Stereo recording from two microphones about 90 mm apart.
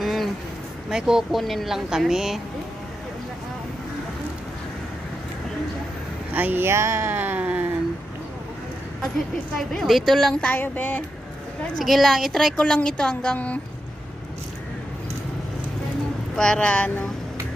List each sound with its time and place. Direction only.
0.0 s a sound: centre (ahead or behind)
0.8 s speech: 5° right (ahead or behind)
6.3 s speech: 20° right (ahead or behind)
9.6 s speech: centre (ahead or behind); by 11.1 s 20° left (ahead or behind)
11.8 s speech: centre (ahead or behind)
16.3 s speech: 10° left (ahead or behind)